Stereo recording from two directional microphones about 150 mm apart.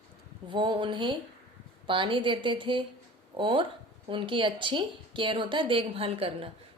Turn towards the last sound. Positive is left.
turn(degrees=-40)  # may be behind; listen again after turning